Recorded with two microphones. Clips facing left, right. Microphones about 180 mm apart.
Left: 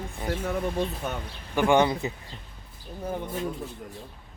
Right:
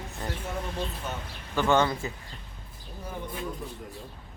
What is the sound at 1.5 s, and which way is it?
Speech, 15° left (ahead or behind).